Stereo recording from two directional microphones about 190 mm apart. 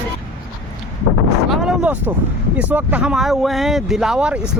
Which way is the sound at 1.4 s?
5° right (ahead or behind).